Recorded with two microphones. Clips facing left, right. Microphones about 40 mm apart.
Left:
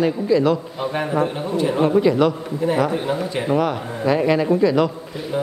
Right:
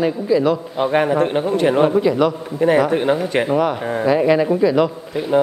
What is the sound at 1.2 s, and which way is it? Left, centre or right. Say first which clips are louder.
Speech: right 4 dB; right.